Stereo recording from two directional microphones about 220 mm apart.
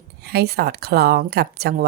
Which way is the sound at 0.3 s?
45° right (ahead or behind).